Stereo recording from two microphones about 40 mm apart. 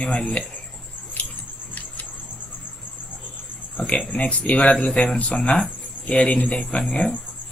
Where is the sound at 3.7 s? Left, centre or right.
Left.